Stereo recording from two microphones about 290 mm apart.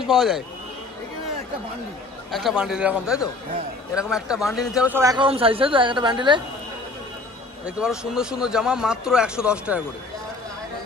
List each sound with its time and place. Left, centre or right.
0.0 s a man's voice: centre
2.3 s speech: centre
7.6 s speech: centre